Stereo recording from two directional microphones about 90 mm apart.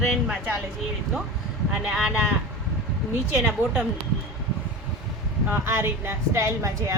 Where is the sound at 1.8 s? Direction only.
10° right (ahead or behind).